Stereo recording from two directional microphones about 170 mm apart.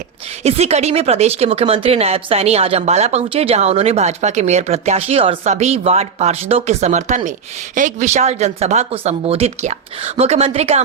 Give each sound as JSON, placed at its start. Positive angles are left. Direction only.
{"t": 0.4, "sound": "speech", "side_deg": -35}